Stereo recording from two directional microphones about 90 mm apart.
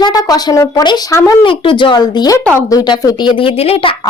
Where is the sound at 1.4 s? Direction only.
70° left (ahead or behind).